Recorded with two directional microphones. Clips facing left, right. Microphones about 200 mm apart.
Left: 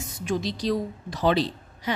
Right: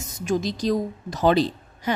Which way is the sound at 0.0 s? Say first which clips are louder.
Right 3 dB; 45° right (ahead or behind).